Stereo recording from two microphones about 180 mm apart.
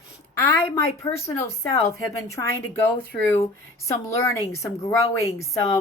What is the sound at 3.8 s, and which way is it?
Speech, 15° left (ahead or behind).